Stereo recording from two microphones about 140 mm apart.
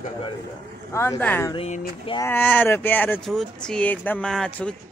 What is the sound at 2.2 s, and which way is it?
Speech, 15° left (ahead or behind).